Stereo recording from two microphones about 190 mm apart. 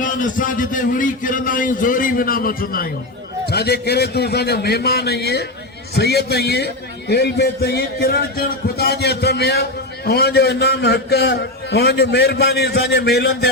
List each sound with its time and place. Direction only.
0.0 s a man's voice: 45° left (ahead or behind); by 13.5 s 60° left (ahead or behind)